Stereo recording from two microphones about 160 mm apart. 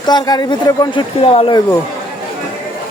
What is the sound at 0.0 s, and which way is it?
A man's voice, 25° left (ahead or behind).